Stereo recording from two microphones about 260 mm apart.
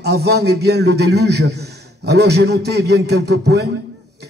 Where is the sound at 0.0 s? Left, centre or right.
Right.